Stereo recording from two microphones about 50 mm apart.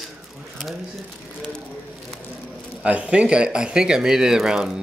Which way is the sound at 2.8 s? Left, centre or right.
Right.